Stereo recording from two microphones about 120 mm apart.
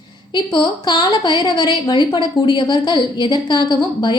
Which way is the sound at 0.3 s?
40° left (ahead or behind).